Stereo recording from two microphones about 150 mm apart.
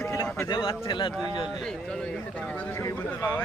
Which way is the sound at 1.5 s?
Centre (ahead or behind).